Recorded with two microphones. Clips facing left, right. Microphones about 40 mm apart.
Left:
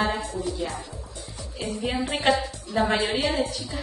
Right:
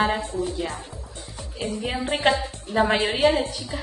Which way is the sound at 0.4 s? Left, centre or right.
Right.